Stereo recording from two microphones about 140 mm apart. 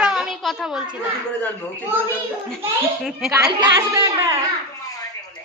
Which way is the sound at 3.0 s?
5° right (ahead or behind).